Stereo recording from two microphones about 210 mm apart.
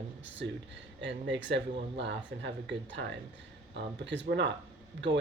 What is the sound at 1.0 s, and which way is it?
Speech, 60° right (ahead or behind).